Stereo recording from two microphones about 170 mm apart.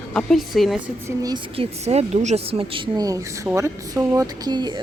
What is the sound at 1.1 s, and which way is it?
Speech, 20° right (ahead or behind).